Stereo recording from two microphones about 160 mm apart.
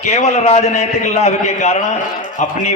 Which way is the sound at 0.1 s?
45° left (ahead or behind).